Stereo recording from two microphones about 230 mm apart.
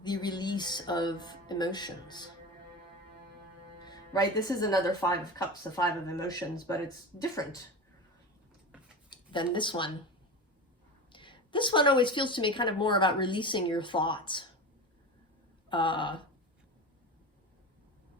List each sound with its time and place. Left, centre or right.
0.0 s a woman's voice: centre
3.8 s speech: centre
9.0 s speech: left
11.1 s a woman's voice: left
15.7 s a woman's voice: left